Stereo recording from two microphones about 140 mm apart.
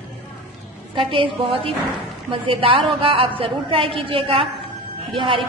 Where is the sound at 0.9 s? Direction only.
35° right (ahead or behind).